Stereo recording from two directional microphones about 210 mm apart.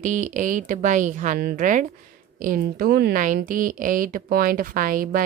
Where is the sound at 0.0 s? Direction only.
35° right (ahead or behind).